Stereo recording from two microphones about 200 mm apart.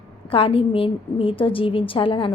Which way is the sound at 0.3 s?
25° left (ahead or behind).